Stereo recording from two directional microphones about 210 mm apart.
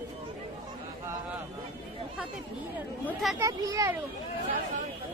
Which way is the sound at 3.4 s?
15° right (ahead or behind).